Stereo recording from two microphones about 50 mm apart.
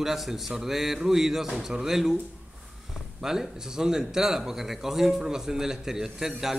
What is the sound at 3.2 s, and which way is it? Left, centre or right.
A man's voice, centre.